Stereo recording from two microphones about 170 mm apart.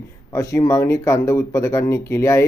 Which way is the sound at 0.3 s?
20° left (ahead or behind).